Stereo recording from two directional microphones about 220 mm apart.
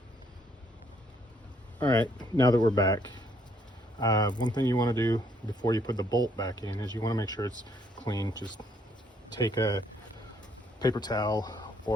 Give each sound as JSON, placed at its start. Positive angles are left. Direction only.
{"t": 2.1, "sound": "speech", "side_deg": 20}